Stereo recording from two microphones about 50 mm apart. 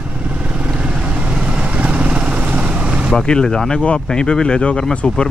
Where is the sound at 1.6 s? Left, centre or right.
Right.